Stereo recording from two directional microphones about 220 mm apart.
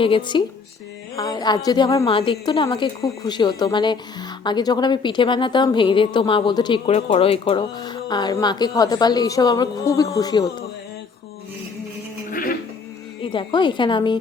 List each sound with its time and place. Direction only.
0.0 s a woman's voice: 20° left (ahead or behind)
12.3 s a sound: 40° left (ahead or behind)
13.2 s a woman's voice: 20° left (ahead or behind)